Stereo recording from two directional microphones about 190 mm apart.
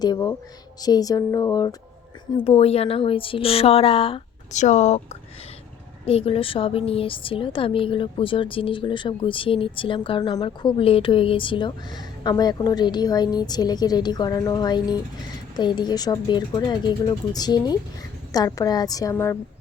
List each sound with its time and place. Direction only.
0.0 s a woman's voice: 20° left (ahead or behind)
2.3 s speech: 30° left (ahead or behind)
6.1 s a woman's voice: 30° left (ahead or behind); by 19.4 s 15° left (ahead or behind)